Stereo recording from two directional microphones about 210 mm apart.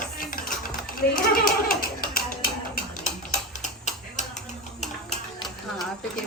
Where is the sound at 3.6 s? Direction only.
35° left (ahead or behind).